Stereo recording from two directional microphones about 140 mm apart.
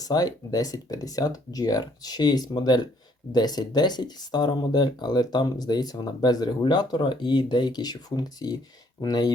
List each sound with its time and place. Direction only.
0.0 s speech: 25° left (ahead or behind)